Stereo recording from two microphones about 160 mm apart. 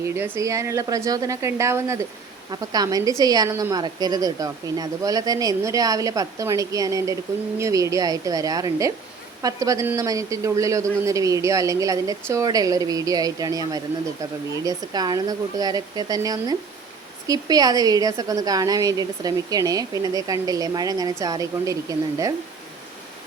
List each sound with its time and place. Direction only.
0.1 s a woman's voice: 15° right (ahead or behind)